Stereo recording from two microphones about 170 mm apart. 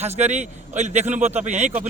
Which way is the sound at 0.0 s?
40° right (ahead or behind).